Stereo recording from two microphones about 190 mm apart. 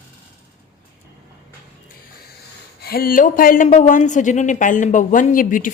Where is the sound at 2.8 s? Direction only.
50° left (ahead or behind).